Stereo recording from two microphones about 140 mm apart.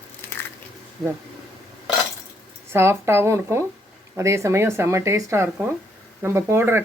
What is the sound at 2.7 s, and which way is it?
Speech, 20° right (ahead or behind).